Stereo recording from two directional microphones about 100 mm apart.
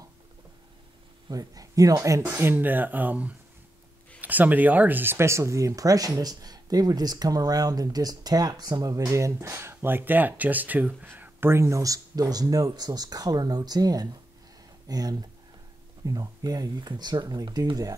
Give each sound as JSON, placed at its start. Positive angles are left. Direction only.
{"t": 1.3, "sound": "speech", "side_deg": -35}
{"t": 2.2, "sound": "speech", "side_deg": -20}